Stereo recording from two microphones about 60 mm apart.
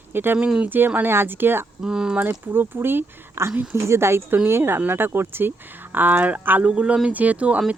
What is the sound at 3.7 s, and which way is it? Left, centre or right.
Speech, right.